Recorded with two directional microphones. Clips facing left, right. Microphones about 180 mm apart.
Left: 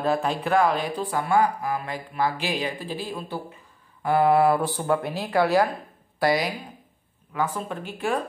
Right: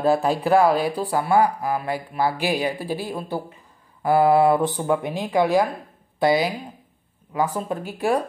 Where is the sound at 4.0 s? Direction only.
35° right (ahead or behind); by 5.6 s 15° right (ahead or behind).